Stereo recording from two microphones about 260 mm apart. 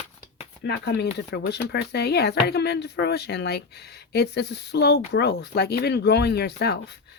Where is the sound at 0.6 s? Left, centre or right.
Left.